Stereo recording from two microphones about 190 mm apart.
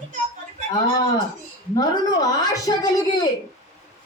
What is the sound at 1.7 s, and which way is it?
A woman's voice, 20° left (ahead or behind).